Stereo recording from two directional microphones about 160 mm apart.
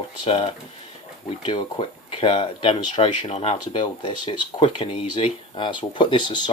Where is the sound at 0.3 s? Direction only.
35° left (ahead or behind).